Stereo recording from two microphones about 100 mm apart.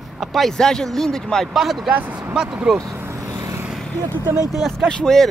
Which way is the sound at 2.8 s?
30° right (ahead or behind).